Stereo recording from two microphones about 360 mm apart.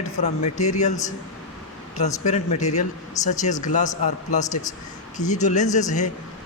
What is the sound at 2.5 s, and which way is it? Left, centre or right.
A man's voice, centre.